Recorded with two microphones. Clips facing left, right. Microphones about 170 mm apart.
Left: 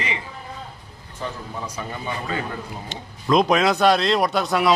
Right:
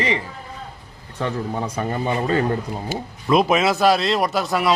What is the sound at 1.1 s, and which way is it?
Speech, 65° right (ahead or behind).